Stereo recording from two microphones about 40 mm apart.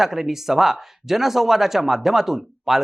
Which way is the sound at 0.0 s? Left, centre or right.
Centre.